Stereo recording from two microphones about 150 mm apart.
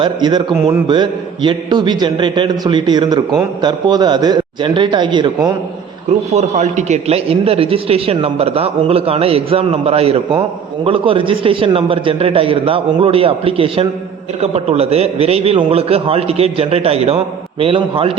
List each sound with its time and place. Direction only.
0.0 s a man's voice: 30° right (ahead or behind)
6.3 s a man's voice: 50° right (ahead or behind)